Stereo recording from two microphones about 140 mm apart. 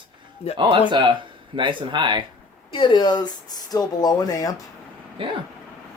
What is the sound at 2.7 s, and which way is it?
Speech, 35° left (ahead or behind).